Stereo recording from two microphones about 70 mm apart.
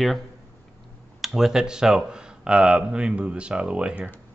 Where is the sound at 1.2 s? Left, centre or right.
Centre.